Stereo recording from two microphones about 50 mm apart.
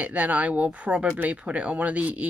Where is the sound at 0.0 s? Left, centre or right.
Right.